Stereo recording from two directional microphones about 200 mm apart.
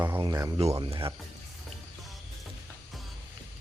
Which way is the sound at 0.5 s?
30° right (ahead or behind).